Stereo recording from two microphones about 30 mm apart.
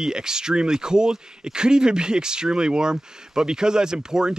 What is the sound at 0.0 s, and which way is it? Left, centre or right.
Speech, right.